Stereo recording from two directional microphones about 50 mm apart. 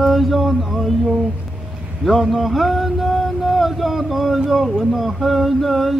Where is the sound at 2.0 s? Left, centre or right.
Centre.